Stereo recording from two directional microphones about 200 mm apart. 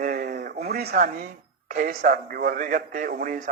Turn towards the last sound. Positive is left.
turn(degrees=-45)  # may be behind; listen again after turning